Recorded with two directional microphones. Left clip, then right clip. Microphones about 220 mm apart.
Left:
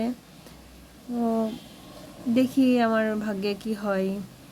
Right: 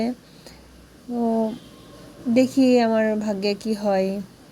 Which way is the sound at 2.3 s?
15° right (ahead or behind).